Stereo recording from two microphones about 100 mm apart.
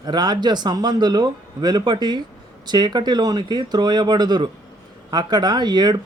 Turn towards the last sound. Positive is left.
turn(degrees=-45)  # may be behind; listen again after turning